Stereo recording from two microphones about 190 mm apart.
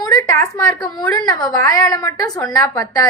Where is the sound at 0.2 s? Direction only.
15° left (ahead or behind).